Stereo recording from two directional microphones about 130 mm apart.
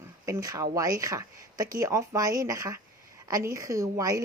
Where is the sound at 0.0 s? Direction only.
25° right (ahead or behind).